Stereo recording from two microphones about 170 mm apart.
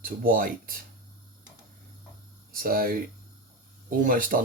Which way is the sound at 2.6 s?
60° right (ahead or behind).